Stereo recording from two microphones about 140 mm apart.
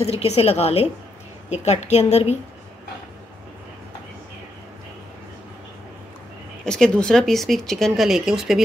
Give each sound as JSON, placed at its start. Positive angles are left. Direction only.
{"t": 0.2, "sound": "a woman's voice", "side_deg": 45}
{"t": 6.6, "sound": "speech", "side_deg": 5}